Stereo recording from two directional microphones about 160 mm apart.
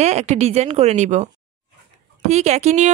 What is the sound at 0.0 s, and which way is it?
Speech, 45° right (ahead or behind).